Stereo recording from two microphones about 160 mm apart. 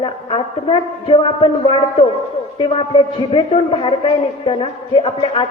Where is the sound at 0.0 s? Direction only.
35° left (ahead or behind).